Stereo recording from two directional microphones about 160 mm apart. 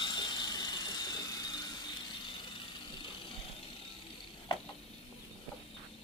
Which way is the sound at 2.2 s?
30° left (ahead or behind).